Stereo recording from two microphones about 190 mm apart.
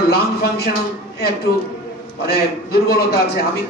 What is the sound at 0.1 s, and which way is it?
Speech, 55° left (ahead or behind).